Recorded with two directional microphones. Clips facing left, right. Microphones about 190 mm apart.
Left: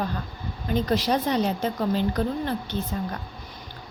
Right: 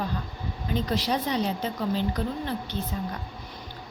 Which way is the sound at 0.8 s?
50° left (ahead or behind).